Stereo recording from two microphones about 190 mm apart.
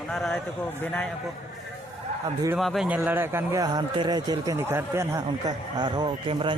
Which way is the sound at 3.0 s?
10° right (ahead or behind).